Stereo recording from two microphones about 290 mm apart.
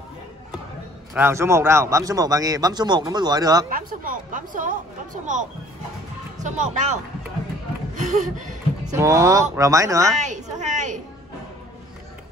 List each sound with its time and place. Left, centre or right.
1.1 s a man's voice: centre
3.7 s speech: right
8.8 s a man's voice: centre
10.2 s speech: right